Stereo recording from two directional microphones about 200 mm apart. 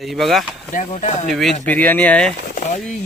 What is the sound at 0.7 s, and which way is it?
Speech, 40° left (ahead or behind).